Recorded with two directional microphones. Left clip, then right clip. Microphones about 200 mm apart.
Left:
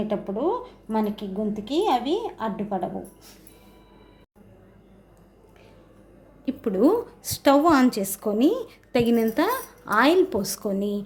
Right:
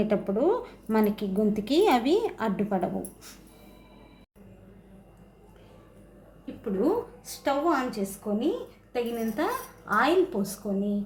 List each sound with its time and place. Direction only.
0.0 s a woman's voice: 5° right (ahead or behind)
6.4 s a woman's voice: 55° left (ahead or behind)
8.9 s a woman's voice: 45° left (ahead or behind)